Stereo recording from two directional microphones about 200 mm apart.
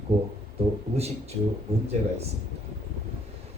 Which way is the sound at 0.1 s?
30° right (ahead or behind).